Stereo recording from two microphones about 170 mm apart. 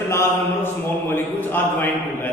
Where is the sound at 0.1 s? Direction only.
15° left (ahead or behind).